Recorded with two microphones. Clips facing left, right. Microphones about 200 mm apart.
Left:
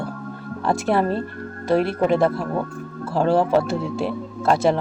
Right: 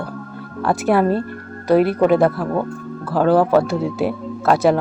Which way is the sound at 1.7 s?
Centre (ahead or behind).